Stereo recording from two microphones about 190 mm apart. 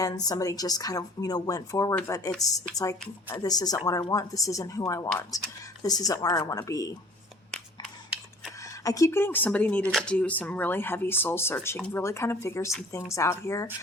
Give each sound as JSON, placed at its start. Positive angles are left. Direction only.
{"t": 0.0, "sound": "a woman's voice", "side_deg": 20}
{"t": 5.8, "sound": "a woman's voice", "side_deg": 20}
{"t": 8.8, "sound": "speech", "side_deg": 15}